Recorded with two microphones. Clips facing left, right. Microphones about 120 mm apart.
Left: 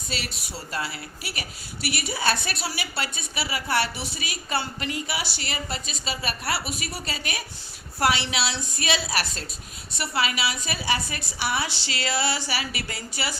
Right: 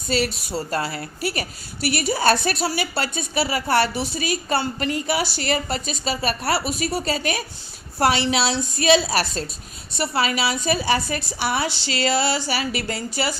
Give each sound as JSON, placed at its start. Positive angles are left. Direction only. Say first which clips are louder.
{"t": 0.1, "sound": "a woman's voice", "louder": "right 12 dB", "side_deg": -40}